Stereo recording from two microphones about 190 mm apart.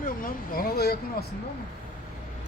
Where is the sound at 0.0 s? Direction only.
50° left (ahead or behind).